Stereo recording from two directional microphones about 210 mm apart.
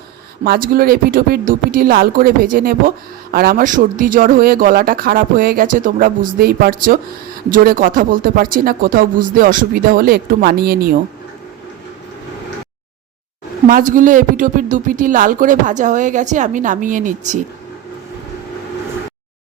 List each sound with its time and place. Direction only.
0.4 s speech: 45° right (ahead or behind)
13.7 s speech: 40° right (ahead or behind)